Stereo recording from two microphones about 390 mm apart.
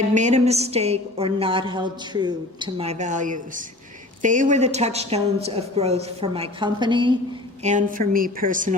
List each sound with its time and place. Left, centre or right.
0.1 s a woman's voice: centre